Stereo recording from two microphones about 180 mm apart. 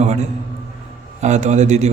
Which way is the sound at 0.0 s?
40° right (ahead or behind).